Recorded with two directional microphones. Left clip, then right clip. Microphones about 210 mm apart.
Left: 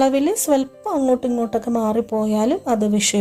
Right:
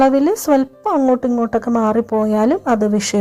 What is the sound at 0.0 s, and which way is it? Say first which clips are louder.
A woman's voice: right 4 dB; 15° right (ahead or behind).